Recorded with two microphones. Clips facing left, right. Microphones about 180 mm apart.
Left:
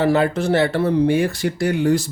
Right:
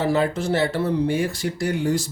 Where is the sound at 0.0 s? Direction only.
65° left (ahead or behind).